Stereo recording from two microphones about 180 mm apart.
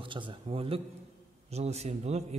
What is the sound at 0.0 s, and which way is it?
A man's voice, 30° right (ahead or behind).